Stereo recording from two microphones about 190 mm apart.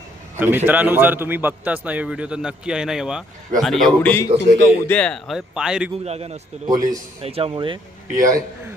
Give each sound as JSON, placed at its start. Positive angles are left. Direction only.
{"t": 0.3, "sound": "a man's voice", "side_deg": -10}
{"t": 6.1, "sound": "a man's voice", "side_deg": -35}